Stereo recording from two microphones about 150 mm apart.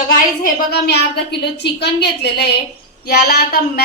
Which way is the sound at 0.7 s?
90° left.